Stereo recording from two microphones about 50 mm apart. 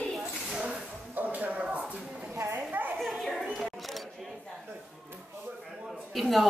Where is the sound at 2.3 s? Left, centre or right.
Right.